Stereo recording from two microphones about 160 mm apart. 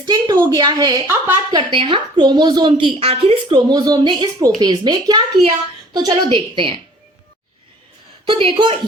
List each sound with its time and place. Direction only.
0.0 s a woman's voice: 25° right (ahead or behind)
1.0 s a woman's voice: 15° right (ahead or behind)
1.5 s a woman's voice: 30° right (ahead or behind)
3.7 s a woman's voice: 25° right (ahead or behind)
8.3 s a woman's voice: 30° right (ahead or behind)